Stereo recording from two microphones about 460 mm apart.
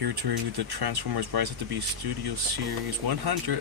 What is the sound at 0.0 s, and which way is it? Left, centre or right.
Speech, right.